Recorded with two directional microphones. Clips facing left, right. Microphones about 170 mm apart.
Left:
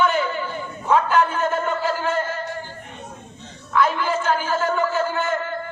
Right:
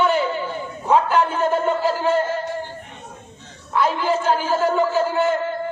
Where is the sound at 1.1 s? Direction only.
30° right (ahead or behind).